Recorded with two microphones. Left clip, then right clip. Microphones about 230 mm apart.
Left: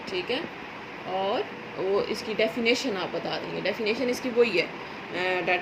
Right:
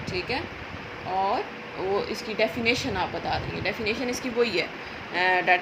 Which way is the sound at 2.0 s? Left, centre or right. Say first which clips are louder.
Right 1 dB; right.